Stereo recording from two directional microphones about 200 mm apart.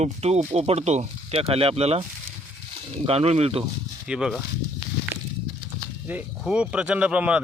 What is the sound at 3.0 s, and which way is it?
Speech, 30° right (ahead or behind).